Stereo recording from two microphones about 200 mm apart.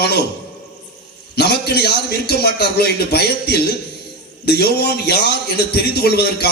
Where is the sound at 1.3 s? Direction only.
55° left (ahead or behind).